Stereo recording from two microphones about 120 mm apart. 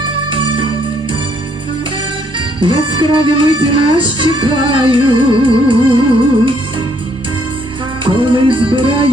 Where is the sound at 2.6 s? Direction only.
45° right (ahead or behind).